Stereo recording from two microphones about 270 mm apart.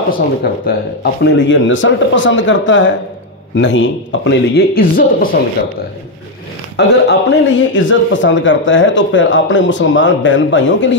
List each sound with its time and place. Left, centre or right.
0.4 s speech: left
6.8 s speech: left